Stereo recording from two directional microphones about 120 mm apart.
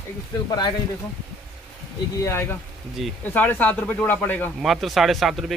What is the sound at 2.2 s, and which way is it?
Speech, 20° left (ahead or behind).